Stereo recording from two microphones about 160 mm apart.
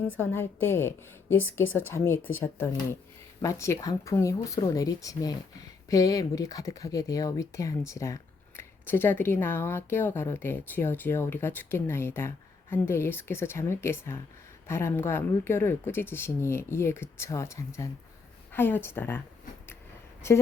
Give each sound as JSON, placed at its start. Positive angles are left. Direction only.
{"t": 0.2, "sound": "speech", "side_deg": 15}